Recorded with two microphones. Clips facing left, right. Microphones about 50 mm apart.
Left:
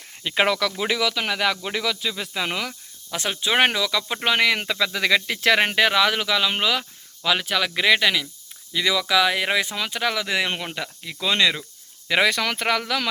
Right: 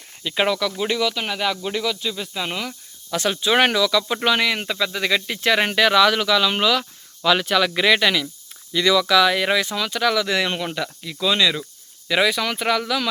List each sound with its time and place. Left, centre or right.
0.2 s speech: left
0.4 s speech: left
0.8 s speech: left
3.2 s speech: left
4.4 s speech: left
5.7 s speech: centre
7.3 s speech: centre; by 11.3 s left
11.3 s speech: left
12.3 s speech: left